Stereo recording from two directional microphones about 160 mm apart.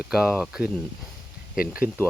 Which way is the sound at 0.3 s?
5° right (ahead or behind).